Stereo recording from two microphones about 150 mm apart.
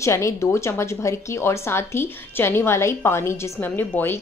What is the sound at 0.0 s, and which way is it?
A woman's voice, 20° left (ahead or behind).